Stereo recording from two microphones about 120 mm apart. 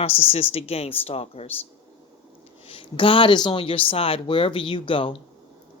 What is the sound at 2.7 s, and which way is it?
A woman's voice, 45° left (ahead or behind).